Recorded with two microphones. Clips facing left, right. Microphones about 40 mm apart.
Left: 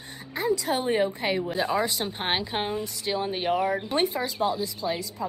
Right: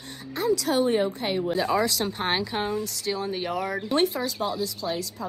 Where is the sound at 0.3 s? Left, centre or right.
Left.